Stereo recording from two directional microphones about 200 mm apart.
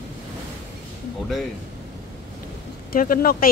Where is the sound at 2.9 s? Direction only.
45° left (ahead or behind).